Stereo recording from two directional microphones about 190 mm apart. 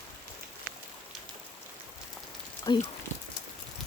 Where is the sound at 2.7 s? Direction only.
20° left (ahead or behind).